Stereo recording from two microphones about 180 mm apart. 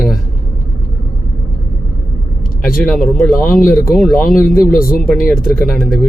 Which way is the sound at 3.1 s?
5° left (ahead or behind).